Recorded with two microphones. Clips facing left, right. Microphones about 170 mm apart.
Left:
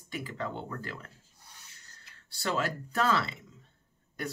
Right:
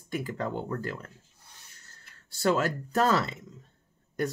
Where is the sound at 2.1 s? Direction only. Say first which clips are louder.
Right 6 dB; 45° right (ahead or behind).